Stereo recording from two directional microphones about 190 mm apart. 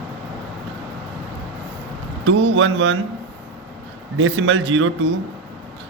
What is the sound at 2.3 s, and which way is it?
Speech, 75° right (ahead or behind).